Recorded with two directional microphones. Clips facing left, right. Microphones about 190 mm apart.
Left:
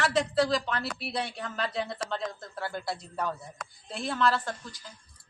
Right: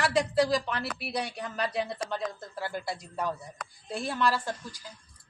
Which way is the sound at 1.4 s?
15° right (ahead or behind).